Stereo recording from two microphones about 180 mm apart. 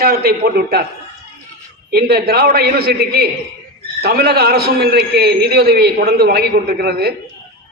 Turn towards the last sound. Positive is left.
turn(degrees=-60)  # may be behind; listen again after turning